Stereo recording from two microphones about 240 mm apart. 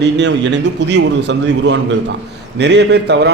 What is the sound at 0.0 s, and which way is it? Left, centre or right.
A man's voice, right.